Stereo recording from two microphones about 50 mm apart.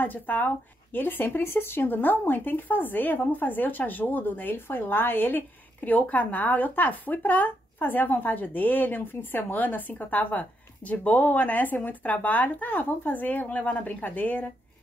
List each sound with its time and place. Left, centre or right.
0.0 s speech: left